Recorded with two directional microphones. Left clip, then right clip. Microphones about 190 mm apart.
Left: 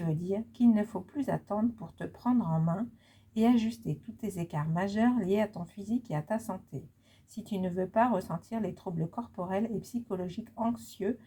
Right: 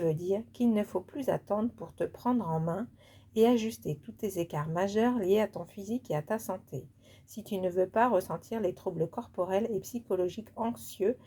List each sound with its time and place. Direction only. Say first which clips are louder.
0.0 s a woman's voice: right 5 dB; 25° right (ahead or behind)